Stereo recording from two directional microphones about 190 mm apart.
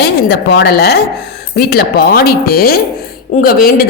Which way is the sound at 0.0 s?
60° left (ahead or behind).